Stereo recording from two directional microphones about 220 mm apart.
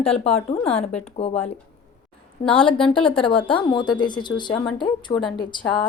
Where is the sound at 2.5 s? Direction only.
25° left (ahead or behind).